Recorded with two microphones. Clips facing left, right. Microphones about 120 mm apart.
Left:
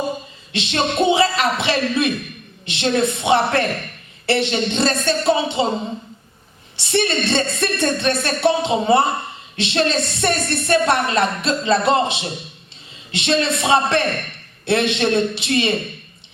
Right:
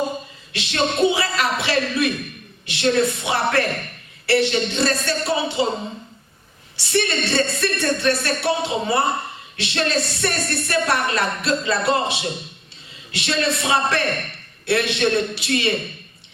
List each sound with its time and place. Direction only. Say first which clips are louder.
0.5 s a woman's voice: left 2 dB; 25° left (ahead or behind)
6.7 s a woman's voice: left 2 dB; 25° left (ahead or behind)